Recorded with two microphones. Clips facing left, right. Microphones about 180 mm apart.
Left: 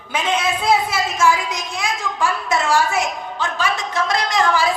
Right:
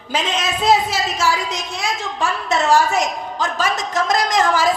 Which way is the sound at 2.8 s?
40° right (ahead or behind).